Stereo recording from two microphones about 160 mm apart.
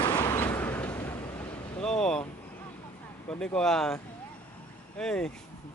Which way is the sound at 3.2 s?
5° left (ahead or behind).